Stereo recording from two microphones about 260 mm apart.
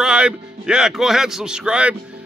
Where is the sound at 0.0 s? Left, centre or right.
Centre.